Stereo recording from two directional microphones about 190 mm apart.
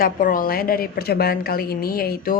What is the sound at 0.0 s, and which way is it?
Speech, 45° left (ahead or behind).